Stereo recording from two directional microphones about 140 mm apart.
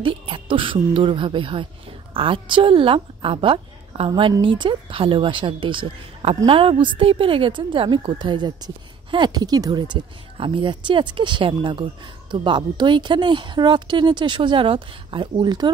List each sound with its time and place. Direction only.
0.0 s speech: 40° right (ahead or behind)
4.1 s speech: 30° right (ahead or behind)